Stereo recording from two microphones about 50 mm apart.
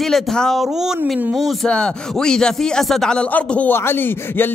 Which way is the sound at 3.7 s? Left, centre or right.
Left.